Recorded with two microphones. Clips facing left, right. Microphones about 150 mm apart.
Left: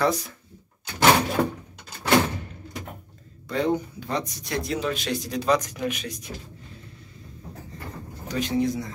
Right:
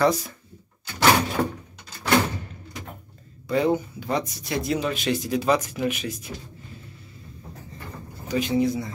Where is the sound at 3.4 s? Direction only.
5° right (ahead or behind).